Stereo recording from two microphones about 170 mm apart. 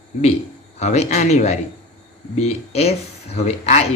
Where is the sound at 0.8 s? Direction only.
45° left (ahead or behind).